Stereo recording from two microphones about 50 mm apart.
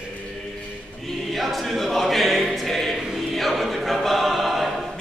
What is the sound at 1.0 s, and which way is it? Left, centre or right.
Choir, centre.